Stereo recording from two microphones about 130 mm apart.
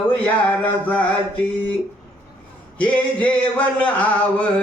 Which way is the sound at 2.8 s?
10° left (ahead or behind).